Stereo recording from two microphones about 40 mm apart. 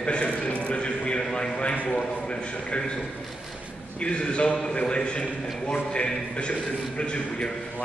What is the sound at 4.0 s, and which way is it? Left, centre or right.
A man's voice, left.